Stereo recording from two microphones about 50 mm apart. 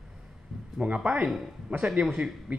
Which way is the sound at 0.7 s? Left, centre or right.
Right.